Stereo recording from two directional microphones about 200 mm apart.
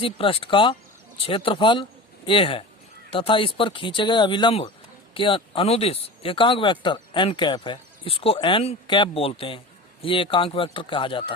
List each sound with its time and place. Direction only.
0.0 s a man's voice: 25° left (ahead or behind)